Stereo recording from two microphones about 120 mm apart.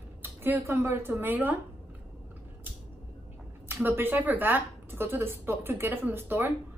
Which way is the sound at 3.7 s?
20° right (ahead or behind).